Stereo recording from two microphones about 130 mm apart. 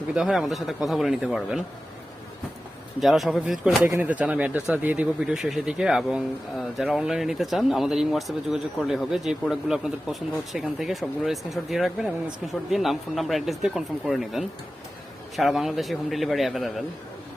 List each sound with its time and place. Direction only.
0.1 s speech: 5° right (ahead or behind)
3.0 s speech: centre (ahead or behind)